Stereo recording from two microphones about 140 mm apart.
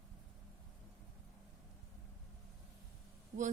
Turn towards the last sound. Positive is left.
turn(degrees=-90)